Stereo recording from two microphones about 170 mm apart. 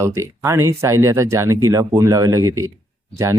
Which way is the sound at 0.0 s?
15° right (ahead or behind).